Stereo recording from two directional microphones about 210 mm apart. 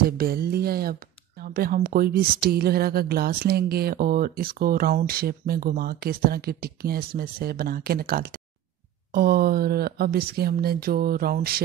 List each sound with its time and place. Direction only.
0.2 s speech: 45° right (ahead or behind)